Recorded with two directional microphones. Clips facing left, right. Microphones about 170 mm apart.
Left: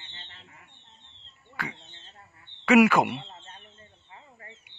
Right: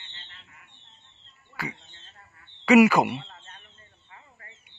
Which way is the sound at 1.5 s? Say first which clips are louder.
Right 1 dB; 5° right (ahead or behind).